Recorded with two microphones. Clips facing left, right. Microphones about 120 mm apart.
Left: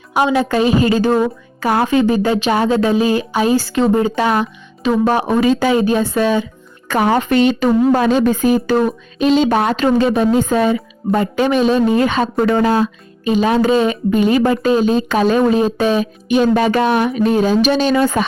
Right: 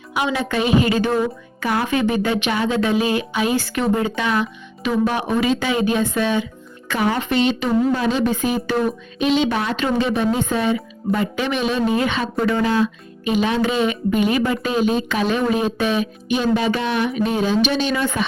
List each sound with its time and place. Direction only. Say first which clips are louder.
0.1 s a woman's voice: left 7 dB; 40° left (ahead or behind)